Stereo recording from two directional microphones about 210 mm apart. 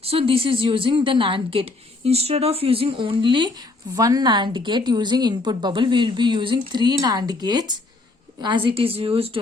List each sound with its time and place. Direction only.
0.0 s a woman's voice: 25° right (ahead or behind)